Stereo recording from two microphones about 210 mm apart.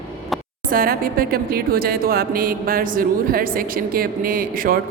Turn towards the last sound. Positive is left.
turn(degrees=-45)  # may be behind; listen again after turning